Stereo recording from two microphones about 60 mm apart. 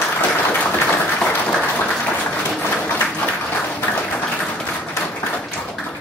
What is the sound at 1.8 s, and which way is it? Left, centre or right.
Applause, left.